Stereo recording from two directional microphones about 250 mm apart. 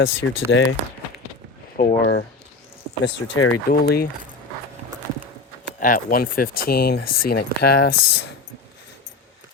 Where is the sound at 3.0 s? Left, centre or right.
Left.